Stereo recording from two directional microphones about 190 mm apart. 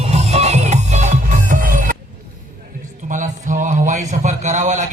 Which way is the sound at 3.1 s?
40° right (ahead or behind).